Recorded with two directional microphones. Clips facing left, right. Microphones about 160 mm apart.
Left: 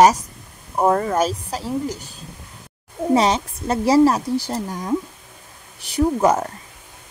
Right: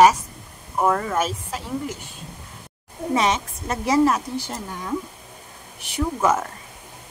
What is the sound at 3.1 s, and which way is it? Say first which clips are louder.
Speech: left 4 dB; 35° left (ahead or behind).